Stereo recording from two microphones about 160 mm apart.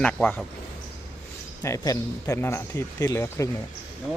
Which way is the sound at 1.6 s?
20° left (ahead or behind).